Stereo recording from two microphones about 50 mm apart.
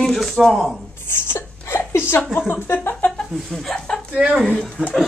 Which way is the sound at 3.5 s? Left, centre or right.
Centre.